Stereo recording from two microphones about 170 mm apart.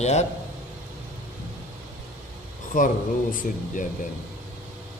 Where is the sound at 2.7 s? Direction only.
50° left (ahead or behind).